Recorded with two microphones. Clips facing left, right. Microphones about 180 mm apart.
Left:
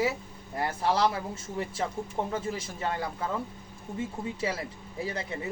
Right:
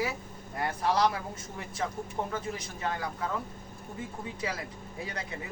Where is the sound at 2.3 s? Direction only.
30° left (ahead or behind).